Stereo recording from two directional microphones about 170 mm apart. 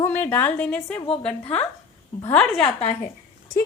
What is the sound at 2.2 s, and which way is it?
Speech, 5° left (ahead or behind).